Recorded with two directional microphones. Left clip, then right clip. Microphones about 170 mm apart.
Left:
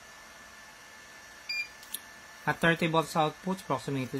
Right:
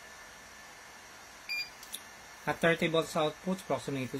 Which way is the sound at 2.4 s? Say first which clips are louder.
Left 2 dB; 65° left (ahead or behind).